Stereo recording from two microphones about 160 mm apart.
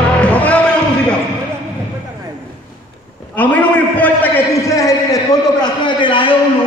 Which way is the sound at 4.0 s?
15° left (ahead or behind).